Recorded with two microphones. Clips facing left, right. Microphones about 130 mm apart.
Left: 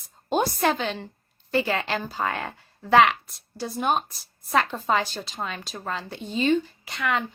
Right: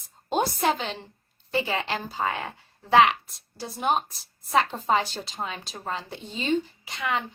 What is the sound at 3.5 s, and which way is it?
A woman's voice, 20° right (ahead or behind).